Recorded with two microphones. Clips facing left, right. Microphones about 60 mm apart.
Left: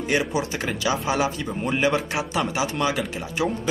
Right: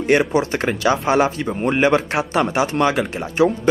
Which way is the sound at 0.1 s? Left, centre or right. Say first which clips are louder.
Right 8 dB; right.